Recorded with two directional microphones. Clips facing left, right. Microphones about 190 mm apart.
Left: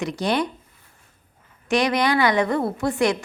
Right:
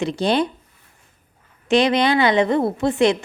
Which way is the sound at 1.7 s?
25° right (ahead or behind).